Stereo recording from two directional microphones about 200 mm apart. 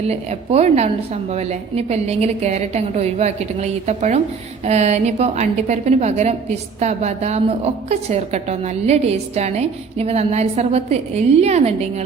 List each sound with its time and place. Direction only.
0.0 s a woman's voice: 30° right (ahead or behind)